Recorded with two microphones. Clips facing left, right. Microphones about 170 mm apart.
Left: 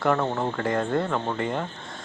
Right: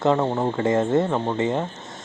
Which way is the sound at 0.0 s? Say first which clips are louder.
Right 4 dB; 20° right (ahead or behind).